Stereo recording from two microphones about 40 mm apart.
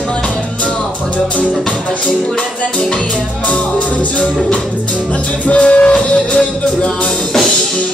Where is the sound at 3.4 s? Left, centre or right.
Left.